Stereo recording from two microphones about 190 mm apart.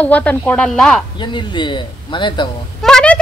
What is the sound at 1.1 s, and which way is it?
Speech, 25° left (ahead or behind).